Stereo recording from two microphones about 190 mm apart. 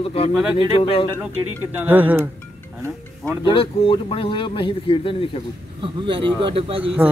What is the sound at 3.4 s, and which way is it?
Speech, 30° left (ahead or behind).